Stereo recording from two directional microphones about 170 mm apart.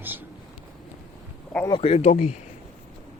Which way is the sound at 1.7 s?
35° left (ahead or behind).